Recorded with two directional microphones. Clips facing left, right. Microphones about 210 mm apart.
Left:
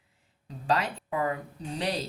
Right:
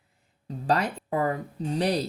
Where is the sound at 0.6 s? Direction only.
45° right (ahead or behind).